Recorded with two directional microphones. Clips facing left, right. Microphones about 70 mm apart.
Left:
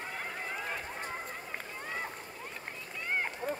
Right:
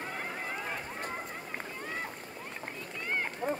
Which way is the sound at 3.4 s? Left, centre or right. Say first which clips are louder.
Right 3 dB; right.